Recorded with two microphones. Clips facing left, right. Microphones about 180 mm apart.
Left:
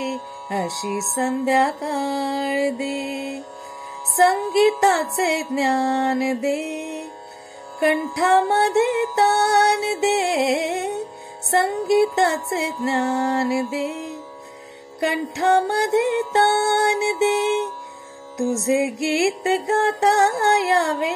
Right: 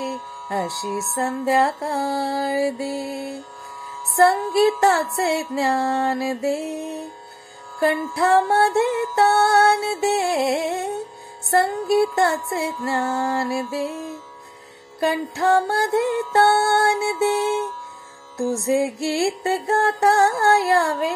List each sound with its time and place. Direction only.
0.0 s music: 20° left (ahead or behind)